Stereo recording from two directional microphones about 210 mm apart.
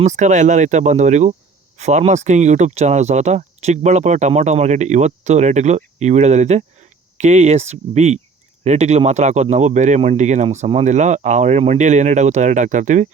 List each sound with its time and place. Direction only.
0.0 s speech: 35° right (ahead or behind)